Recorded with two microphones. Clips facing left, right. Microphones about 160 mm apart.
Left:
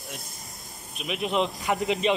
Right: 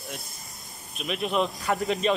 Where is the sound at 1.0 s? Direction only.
15° left (ahead or behind).